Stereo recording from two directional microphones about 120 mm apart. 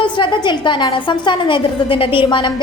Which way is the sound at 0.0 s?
40° left (ahead or behind).